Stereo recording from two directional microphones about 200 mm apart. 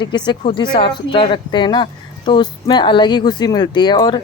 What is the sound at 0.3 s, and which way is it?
Speech, 25° left (ahead or behind).